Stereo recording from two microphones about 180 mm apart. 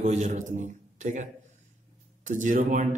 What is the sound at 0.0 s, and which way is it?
A man's voice, 40° right (ahead or behind).